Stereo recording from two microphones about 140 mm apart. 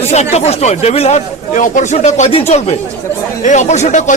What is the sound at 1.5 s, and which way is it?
Speech, 65° left (ahead or behind).